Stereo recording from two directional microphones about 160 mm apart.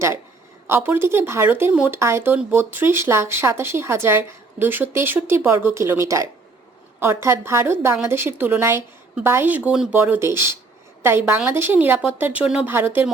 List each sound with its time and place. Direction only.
0.7 s speech: 15° right (ahead or behind)